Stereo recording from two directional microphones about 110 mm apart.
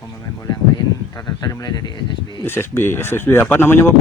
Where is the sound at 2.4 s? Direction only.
20° left (ahead or behind).